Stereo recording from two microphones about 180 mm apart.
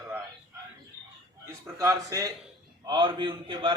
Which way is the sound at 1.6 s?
15° right (ahead or behind).